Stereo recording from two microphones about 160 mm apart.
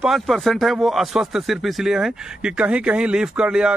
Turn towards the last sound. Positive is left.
turn(degrees=-5)  # may be behind; listen again after turning